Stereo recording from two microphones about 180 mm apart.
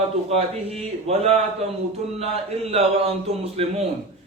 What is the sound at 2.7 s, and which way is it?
A man's voice, 35° right (ahead or behind).